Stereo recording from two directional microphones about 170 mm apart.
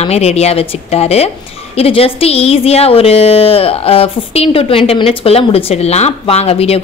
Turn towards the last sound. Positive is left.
turn(degrees=35)  # may be behind; listen again after turning